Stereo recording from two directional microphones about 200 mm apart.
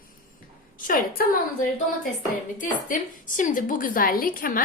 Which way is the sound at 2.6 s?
40° left (ahead or behind).